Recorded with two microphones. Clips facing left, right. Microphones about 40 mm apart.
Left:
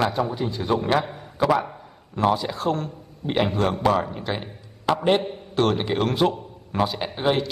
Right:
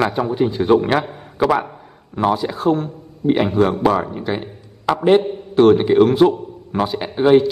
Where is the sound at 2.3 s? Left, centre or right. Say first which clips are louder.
Right 8 dB; centre.